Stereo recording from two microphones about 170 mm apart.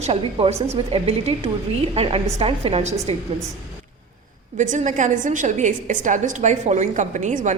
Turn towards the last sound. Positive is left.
turn(degrees=-45)  # may be behind; listen again after turning